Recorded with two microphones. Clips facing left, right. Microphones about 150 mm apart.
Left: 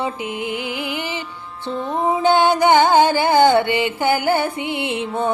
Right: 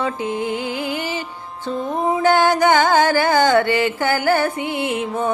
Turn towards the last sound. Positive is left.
turn(degrees=25)  # may be behind; listen again after turning